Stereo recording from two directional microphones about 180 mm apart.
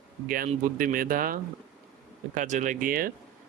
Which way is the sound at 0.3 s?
50° right (ahead or behind).